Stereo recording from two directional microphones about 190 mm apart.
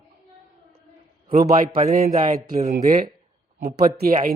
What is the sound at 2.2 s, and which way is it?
Speech, 45° right (ahead or behind).